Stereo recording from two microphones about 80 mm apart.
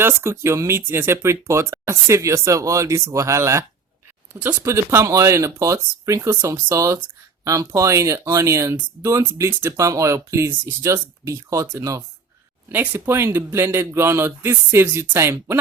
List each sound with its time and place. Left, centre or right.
0.0 s speech: right
4.4 s speech: right
4.6 s speech: right
12.6 s speech: right